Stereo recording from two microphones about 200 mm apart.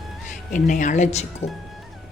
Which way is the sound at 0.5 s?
40° left (ahead or behind).